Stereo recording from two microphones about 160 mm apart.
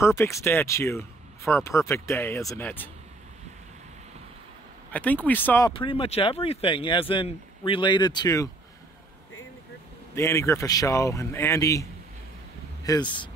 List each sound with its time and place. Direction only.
0.0 s speech: 15° left (ahead or behind)
4.9 s speech: 10° left (ahead or behind)
5.7 s speech: 35° left (ahead or behind)
10.1 s speech: 15° left (ahead or behind)
12.8 s speech: 25° left (ahead or behind)